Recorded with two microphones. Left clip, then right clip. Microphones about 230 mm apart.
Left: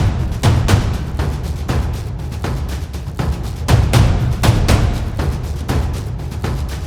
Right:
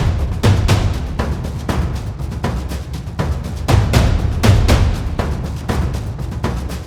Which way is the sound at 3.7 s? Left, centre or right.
Centre.